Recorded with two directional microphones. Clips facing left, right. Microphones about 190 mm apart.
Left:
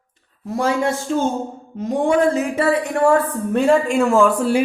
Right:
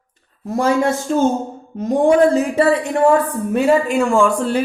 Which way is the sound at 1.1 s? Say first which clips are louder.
Right 4 dB; 45° right (ahead or behind).